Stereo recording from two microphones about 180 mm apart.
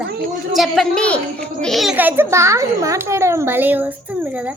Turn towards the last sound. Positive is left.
turn(degrees=-10)  # may be behind; listen again after turning